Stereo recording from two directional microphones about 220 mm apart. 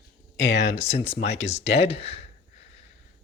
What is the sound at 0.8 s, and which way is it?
Speech, 30° left (ahead or behind).